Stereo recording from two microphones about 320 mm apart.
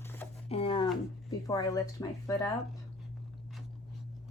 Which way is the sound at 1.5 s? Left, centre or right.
Centre.